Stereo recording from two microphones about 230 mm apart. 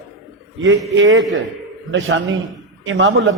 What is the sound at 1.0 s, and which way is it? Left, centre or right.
Speech, right.